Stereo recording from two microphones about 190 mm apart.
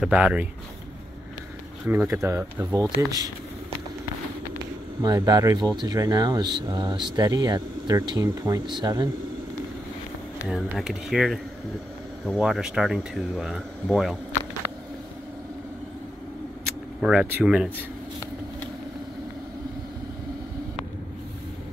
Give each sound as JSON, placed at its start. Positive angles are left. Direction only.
{"t": 0.0, "sound": "speech", "side_deg": -5}
{"t": 1.9, "sound": "speech", "side_deg": -15}
{"t": 5.0, "sound": "speech", "side_deg": -20}
{"t": 10.5, "sound": "speech", "side_deg": 0}
{"t": 17.0, "sound": "speech", "side_deg": -5}